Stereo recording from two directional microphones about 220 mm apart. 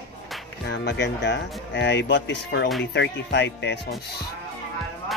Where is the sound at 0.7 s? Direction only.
50° left (ahead or behind).